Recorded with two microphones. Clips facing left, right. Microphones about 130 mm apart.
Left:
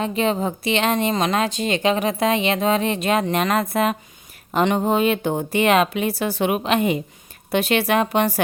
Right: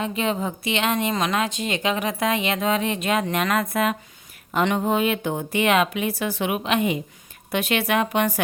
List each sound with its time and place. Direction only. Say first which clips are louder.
0.0 s a woman's voice: left 3 dB; 35° left (ahead or behind)